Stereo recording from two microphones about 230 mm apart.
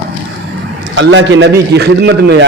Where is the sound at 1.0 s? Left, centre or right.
Right.